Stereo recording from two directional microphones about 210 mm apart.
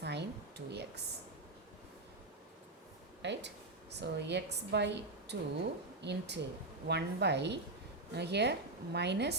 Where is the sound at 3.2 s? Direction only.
55° right (ahead or behind).